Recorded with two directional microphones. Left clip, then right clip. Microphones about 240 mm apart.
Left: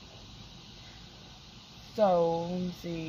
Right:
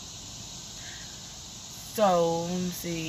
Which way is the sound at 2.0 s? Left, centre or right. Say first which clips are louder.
Right 2 dB; centre.